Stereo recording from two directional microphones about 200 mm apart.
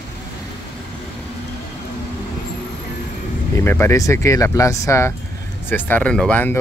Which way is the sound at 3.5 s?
10° left (ahead or behind).